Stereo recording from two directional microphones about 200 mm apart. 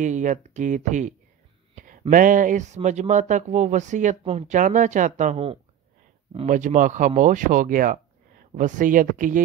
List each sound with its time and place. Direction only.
0.0 s speech: 40° right (ahead or behind)